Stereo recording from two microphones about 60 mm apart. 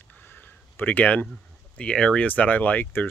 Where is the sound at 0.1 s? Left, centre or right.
Left.